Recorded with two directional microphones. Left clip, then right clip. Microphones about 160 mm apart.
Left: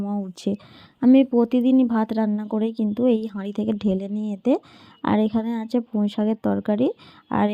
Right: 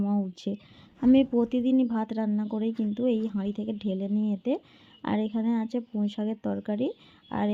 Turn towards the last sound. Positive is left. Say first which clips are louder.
# left 8 dB
turn(degrees=30)  # may be behind; listen again after turning